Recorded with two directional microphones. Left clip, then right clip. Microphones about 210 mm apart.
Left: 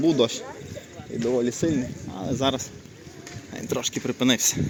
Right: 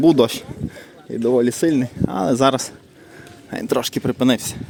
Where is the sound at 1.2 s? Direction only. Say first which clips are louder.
Right 7 dB; 50° right (ahead or behind); by 4.6 s 25° right (ahead or behind).